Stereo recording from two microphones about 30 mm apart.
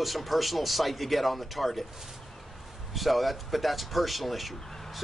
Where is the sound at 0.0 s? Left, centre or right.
Centre.